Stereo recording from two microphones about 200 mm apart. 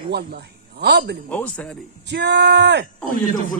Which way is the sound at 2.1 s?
60° right (ahead or behind).